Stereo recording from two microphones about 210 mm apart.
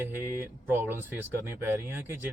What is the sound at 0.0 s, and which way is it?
Speech, 10° right (ahead or behind).